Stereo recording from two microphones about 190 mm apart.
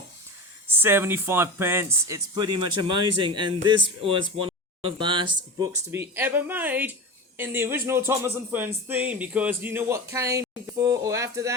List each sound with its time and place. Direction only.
0.7 s speech: 10° right (ahead or behind)
5.9 s speech: 10° right (ahead or behind)